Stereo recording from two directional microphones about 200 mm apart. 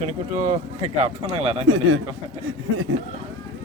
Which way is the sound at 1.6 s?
85° right.